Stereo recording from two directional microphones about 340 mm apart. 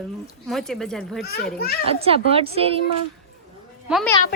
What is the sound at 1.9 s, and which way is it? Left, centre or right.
Speech, centre.